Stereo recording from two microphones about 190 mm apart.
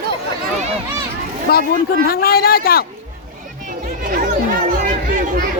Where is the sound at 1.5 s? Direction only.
55° left (ahead or behind).